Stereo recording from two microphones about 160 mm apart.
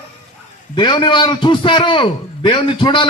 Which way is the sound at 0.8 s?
30° left (ahead or behind).